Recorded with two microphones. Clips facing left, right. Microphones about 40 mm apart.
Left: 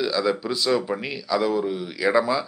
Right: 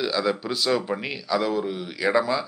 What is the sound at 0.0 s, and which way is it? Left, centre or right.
Speech, centre.